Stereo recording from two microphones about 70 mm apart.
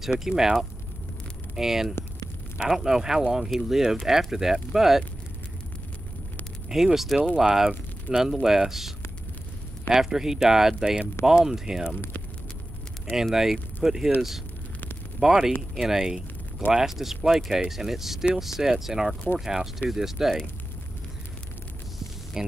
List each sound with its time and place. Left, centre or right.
0.0 s speech: centre
6.7 s speech: centre
13.1 s speech: centre
15.1 s speech: centre